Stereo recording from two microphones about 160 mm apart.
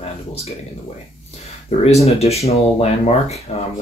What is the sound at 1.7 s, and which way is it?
Speech, 40° left (ahead or behind).